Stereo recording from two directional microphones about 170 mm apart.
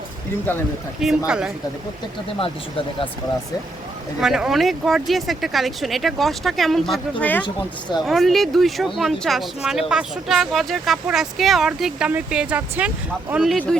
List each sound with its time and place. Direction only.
1.0 s speech: centre (ahead or behind)
2.4 s speech: 30° left (ahead or behind)
4.2 s speech: 5° right (ahead or behind)
7.4 s speech: 25° left (ahead or behind)
8.0 s speech: centre (ahead or behind)